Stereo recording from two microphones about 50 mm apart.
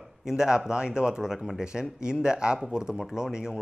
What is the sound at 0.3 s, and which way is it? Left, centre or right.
Speech, centre.